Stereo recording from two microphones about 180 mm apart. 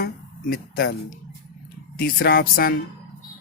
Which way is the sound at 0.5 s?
60° left (ahead or behind).